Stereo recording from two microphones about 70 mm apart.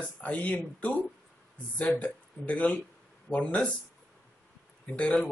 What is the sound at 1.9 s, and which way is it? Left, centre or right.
Speech, centre.